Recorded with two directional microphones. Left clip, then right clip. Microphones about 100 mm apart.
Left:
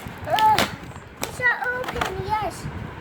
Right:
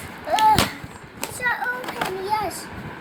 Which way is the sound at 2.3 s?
15° left (ahead or behind).